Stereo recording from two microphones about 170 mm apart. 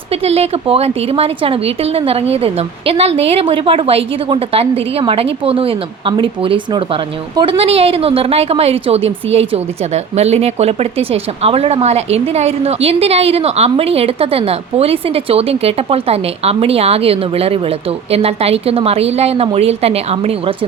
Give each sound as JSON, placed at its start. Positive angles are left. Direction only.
{"t": 0.1, "sound": "a woman's voice", "side_deg": -35}